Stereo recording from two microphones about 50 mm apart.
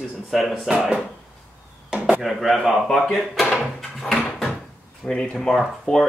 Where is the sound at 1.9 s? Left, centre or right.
Right.